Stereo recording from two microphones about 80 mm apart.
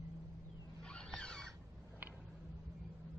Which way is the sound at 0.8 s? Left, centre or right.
Centre.